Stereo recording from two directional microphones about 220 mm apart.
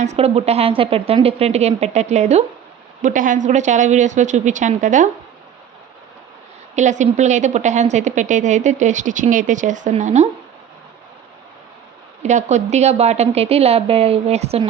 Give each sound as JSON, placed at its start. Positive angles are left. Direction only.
{"t": 0.0, "sound": "a woman's voice", "side_deg": -30}
{"t": 6.7, "sound": "a woman's voice", "side_deg": -35}
{"t": 12.2, "sound": "a woman's voice", "side_deg": -30}